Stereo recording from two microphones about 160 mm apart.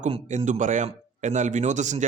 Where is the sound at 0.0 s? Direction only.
45° right (ahead or behind).